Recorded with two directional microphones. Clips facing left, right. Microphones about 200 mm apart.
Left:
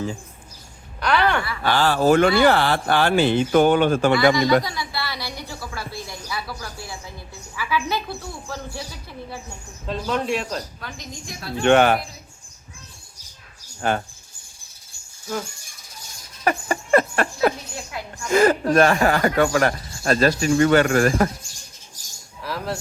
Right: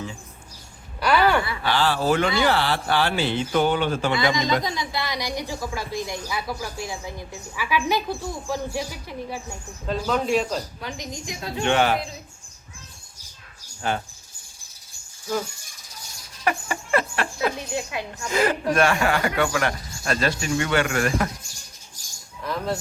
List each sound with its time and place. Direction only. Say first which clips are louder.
1.0 s a woman's voice: right 1 dB; 5° right (ahead or behind)
1.6 s speech: left 6 dB; 45° left (ahead or behind)
4.6 s a woman's voice: right 2 dB; 20° right (ahead or behind)
9.8 s speech: right 1 dB; centre (ahead or behind)
10.8 s a woman's voice: right 3 dB; 15° right (ahead or behind)
11.6 s a man's voice: left 5 dB; 55° left (ahead or behind)
13.8 s speech: left 4 dB; 50° left (ahead or behind)
16.4 s a sound: left 3 dB; 45° left (ahead or behind)
18.3 s speech: left 5 dB; 45° left (ahead or behind)
22.4 s speech: right 1 dB; 5° left (ahead or behind)